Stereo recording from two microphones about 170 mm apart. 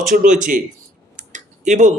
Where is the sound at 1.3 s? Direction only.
45° right (ahead or behind).